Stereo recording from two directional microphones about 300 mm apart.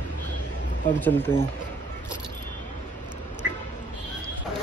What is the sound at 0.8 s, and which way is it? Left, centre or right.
Speech, centre.